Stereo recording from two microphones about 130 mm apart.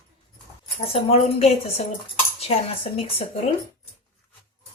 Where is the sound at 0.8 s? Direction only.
50° left (ahead or behind).